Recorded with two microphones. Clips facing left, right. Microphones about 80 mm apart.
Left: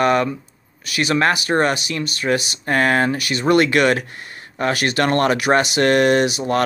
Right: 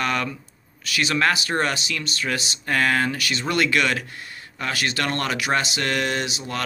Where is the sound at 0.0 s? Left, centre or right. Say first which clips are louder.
Left 8 dB; left.